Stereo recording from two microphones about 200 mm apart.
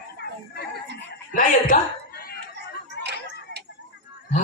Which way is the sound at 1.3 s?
40° left (ahead or behind).